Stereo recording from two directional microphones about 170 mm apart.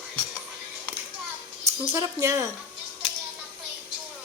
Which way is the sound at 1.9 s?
15° right (ahead or behind).